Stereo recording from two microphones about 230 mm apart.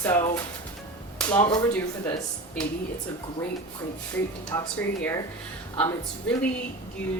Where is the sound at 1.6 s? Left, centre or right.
Centre.